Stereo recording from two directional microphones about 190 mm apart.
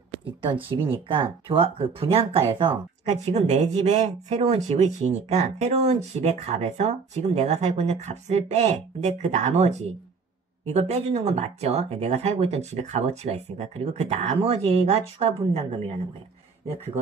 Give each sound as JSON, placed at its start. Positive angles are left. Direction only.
{"t": 1.0, "sound": "speech", "side_deg": -25}